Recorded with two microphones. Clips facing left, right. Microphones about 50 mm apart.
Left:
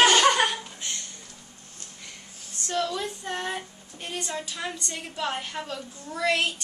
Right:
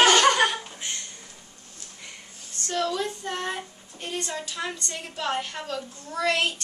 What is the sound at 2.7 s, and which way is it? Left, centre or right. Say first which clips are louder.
A woman's voice: right 1 dB; centre.